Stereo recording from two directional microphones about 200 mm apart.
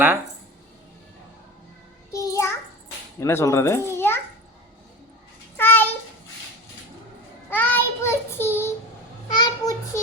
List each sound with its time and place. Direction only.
2.1 s child singing: 15° left (ahead or behind)
3.2 s a child's voice: 15° left (ahead or behind)
5.5 s a sound: 10° left (ahead or behind)
7.5 s child singing: 10° left (ahead or behind)
9.3 s a child's voice: 20° left (ahead or behind)